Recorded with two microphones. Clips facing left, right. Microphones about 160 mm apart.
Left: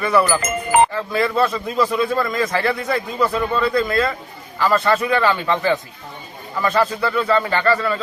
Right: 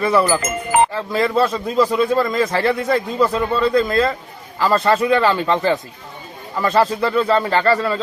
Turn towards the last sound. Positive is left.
turn(degrees=-35)  # may be behind; listen again after turning